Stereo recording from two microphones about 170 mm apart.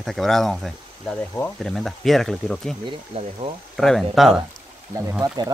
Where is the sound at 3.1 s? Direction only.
35° right (ahead or behind).